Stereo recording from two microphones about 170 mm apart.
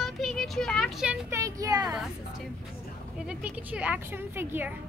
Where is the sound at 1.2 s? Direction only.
15° right (ahead or behind).